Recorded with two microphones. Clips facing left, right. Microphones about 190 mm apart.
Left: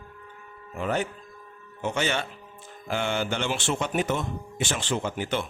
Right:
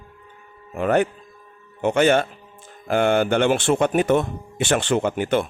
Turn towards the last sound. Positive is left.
turn(degrees=-55)  # may be behind; listen again after turning